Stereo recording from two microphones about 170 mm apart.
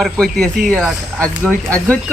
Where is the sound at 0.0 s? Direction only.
5° left (ahead or behind).